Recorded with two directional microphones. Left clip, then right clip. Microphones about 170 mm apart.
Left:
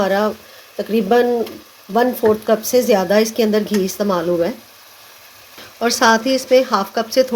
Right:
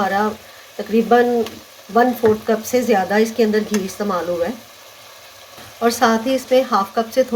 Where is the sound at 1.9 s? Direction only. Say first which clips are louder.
Even; 45° left (ahead or behind).